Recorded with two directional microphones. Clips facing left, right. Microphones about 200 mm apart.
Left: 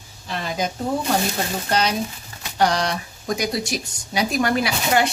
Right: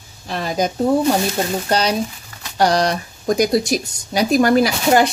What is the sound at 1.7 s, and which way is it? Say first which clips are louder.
Speech: right 1 dB; 35° right (ahead or behind).